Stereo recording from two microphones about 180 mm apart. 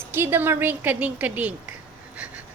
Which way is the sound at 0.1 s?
10° right (ahead or behind).